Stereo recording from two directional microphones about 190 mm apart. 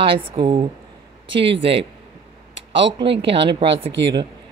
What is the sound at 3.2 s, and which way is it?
Speech, 30° right (ahead or behind).